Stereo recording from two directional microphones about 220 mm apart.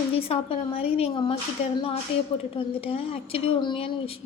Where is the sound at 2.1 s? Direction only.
55° left (ahead or behind).